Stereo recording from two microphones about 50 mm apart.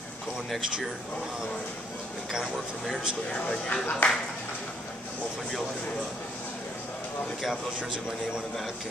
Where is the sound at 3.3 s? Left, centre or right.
Centre.